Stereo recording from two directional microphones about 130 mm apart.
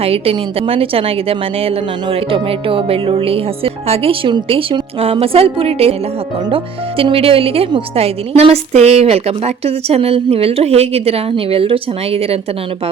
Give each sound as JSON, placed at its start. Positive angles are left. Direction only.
{"t": 0.0, "sound": "a woman's voice", "side_deg": -50}